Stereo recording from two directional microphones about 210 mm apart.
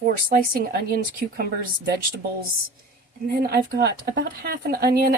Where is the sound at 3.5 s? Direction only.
50° right (ahead or behind).